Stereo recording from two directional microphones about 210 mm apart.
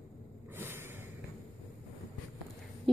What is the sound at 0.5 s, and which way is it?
Snort, 10° right (ahead or behind).